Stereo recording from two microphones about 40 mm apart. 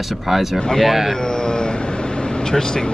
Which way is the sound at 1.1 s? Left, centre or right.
Centre.